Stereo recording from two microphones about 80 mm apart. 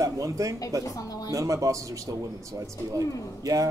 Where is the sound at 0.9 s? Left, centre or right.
Left.